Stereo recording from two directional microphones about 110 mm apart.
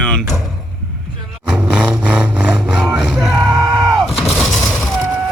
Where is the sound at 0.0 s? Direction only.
5° left (ahead or behind).